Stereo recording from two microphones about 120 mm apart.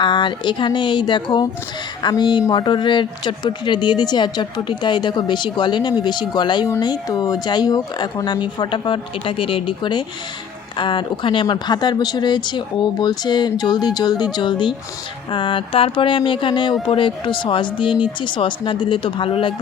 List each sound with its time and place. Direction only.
0.0 s speech: 40° left (ahead or behind)